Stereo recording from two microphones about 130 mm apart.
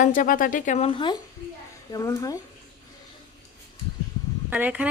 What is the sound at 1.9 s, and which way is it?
Speech, 25° left (ahead or behind).